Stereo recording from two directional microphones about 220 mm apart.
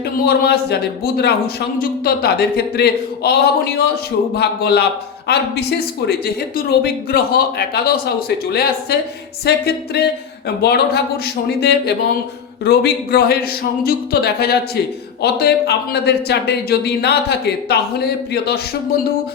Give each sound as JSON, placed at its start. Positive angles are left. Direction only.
{"t": 0.3, "sound": "speech", "side_deg": 45}
{"t": 6.7, "sound": "speech", "side_deg": 45}